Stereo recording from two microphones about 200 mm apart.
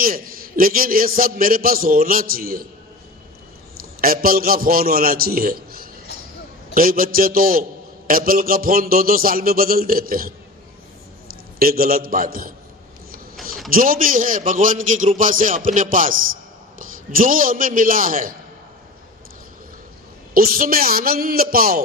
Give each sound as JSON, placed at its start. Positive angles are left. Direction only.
{"t": 0.0, "sound": "a man's voice", "side_deg": -45}
{"t": 4.0, "sound": "a man's voice", "side_deg": -45}
{"t": 11.6, "sound": "a man's voice", "side_deg": -45}
{"t": 13.7, "sound": "a man's voice", "side_deg": -45}
{"t": 20.3, "sound": "a man's voice", "side_deg": -45}